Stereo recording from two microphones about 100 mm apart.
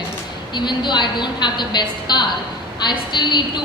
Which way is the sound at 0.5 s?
50° left (ahead or behind).